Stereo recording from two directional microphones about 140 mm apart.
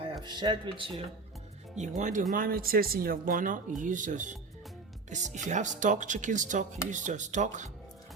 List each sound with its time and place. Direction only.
0.0 s speech: 35° right (ahead or behind)
2.0 s speech: 60° right (ahead or behind)
2.3 s speech: 85° right; by 7.7 s 60° right (ahead or behind)